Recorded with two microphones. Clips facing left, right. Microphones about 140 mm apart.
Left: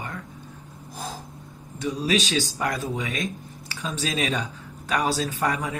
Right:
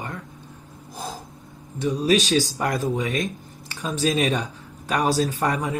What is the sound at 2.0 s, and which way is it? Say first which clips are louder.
Speech: right 4 dB; 35° right (ahead or behind).